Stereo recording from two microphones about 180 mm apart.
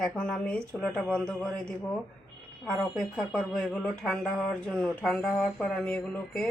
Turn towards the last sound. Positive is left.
turn(degrees=5)  # may be behind; listen again after turning